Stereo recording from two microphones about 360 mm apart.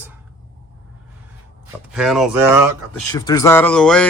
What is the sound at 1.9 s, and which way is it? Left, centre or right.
Speech, centre.